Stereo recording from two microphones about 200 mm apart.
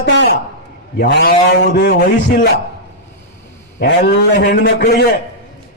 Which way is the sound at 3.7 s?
55° left (ahead or behind).